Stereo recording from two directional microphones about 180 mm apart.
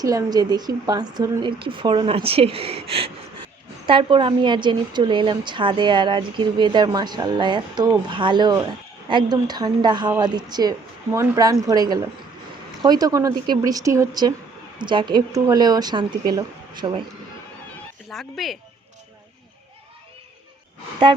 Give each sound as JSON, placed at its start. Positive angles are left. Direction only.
{"t": 0.0, "sound": "a woman's voice", "side_deg": -20}
{"t": 18.1, "sound": "speech", "side_deg": 0}